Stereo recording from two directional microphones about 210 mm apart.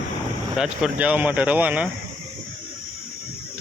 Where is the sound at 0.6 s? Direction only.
5° right (ahead or behind).